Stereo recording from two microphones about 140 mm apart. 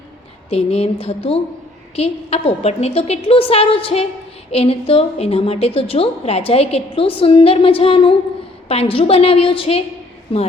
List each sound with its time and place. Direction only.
0.5 s a woman's voice: 45° left (ahead or behind)